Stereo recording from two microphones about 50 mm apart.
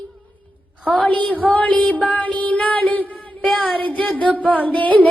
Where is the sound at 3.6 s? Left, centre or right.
Left.